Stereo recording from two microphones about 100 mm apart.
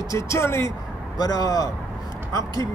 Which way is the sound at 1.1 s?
40° left (ahead or behind).